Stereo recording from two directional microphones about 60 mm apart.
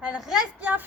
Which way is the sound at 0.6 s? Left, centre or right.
Right.